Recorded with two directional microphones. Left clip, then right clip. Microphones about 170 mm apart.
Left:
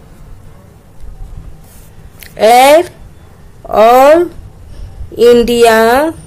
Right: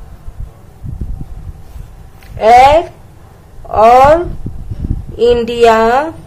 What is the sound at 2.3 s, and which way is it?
A woman's voice, 45° left (ahead or behind).